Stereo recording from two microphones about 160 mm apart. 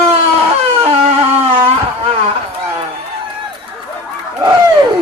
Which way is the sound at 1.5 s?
40° right (ahead or behind).